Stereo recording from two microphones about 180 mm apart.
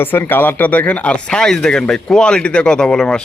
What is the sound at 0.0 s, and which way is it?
Speech, 10° left (ahead or behind).